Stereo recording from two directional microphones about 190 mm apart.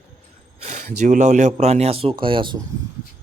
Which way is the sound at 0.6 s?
40° right (ahead or behind).